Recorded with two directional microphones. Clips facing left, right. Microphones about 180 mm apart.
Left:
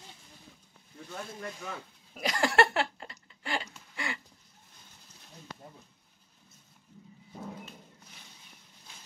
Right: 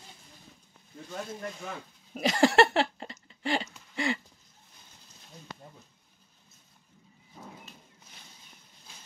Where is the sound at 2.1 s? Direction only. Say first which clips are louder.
Right 5 dB; 25° right (ahead or behind).